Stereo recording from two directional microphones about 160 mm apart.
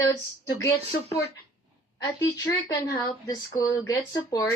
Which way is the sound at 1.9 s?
20° left (ahead or behind).